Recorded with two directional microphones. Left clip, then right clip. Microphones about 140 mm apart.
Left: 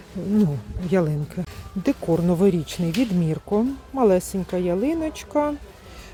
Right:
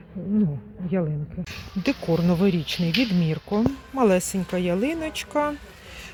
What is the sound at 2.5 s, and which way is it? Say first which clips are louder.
Speech: left 1 dB; 30° left (ahead or behind).